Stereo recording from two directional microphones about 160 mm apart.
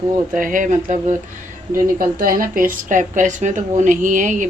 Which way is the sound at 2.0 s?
65° right (ahead or behind).